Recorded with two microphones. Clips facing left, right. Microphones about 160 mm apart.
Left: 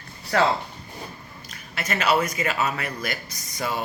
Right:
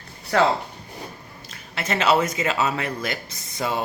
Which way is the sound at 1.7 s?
25° right (ahead or behind).